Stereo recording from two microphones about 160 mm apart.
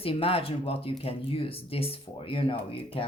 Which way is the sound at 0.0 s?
35° left (ahead or behind).